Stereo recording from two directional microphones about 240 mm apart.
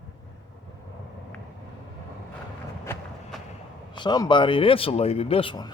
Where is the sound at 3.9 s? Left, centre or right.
Centre.